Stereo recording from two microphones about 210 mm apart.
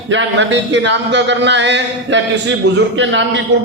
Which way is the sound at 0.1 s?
60° right (ahead or behind).